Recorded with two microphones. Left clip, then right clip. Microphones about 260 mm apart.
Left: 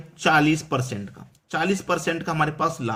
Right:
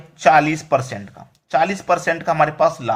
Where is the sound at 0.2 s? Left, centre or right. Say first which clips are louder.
Right 6 dB; centre.